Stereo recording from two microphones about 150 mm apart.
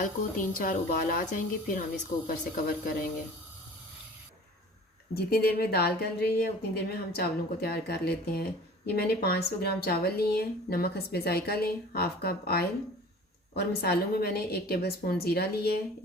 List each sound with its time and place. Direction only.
0.0 s speech: 65° left (ahead or behind)
2.2 s speech: 75° left (ahead or behind)
5.1 s a woman's voice: 90° left